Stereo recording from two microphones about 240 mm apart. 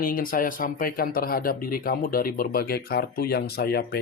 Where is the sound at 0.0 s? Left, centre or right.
Left.